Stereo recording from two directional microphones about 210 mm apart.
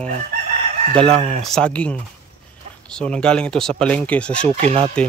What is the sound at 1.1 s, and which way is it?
Speech, 30° right (ahead or behind).